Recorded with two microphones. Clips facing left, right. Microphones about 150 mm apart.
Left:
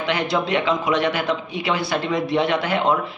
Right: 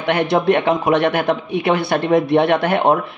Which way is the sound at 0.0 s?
55° right (ahead or behind).